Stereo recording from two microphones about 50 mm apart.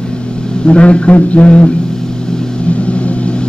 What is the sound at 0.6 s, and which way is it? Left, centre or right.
A man's voice, left.